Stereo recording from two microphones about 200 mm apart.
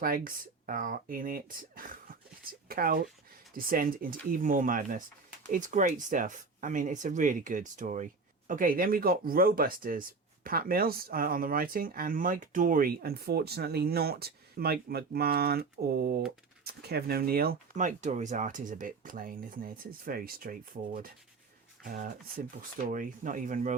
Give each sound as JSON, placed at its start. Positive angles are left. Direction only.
{"t": 0.0, "sound": "speech", "side_deg": -45}